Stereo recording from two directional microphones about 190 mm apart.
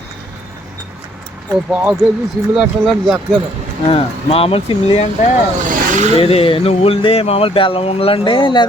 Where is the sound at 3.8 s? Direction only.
30° left (ahead or behind).